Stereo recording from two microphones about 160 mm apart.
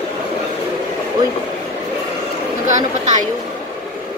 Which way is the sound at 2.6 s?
50° right (ahead or behind).